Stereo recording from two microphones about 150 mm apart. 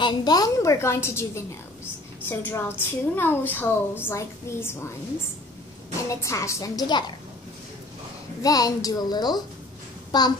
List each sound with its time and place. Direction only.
0.0 s a woman's voice: 25° left (ahead or behind)
6.0 s a woman's voice: 20° left (ahead or behind)
8.4 s a woman's voice: 25° left (ahead or behind)